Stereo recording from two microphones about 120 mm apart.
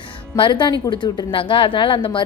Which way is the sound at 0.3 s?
45° left (ahead or behind).